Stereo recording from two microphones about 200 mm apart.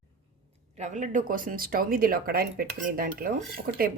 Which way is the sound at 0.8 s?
40° right (ahead or behind).